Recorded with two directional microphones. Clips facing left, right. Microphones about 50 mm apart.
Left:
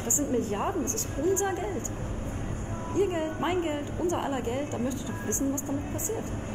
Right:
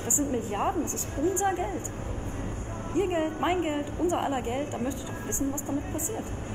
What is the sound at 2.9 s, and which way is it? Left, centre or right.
A woman's voice, centre.